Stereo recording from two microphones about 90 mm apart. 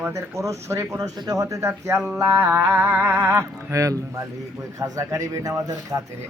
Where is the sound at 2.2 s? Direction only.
25° right (ahead or behind).